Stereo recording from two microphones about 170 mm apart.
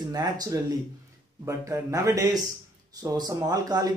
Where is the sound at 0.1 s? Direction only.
20° right (ahead or behind).